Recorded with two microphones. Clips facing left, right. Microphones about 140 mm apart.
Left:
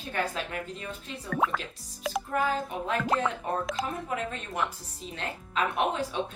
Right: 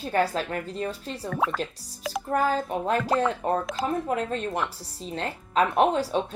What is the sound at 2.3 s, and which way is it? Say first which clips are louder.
Speech: right 5 dB; 35° right (ahead or behind).